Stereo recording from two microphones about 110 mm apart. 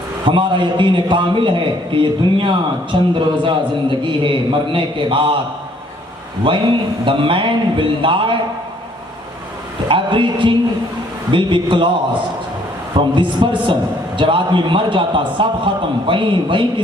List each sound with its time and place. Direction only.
0.3 s a man's voice: 50° right (ahead or behind)
6.4 s a man's voice: 50° right (ahead or behind)
9.9 s a man's voice: 50° right (ahead or behind)